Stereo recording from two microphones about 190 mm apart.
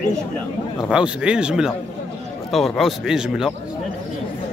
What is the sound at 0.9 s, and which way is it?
Speech, 5° right (ahead or behind).